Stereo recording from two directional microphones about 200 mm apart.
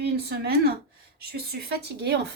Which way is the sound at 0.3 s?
50° right (ahead or behind).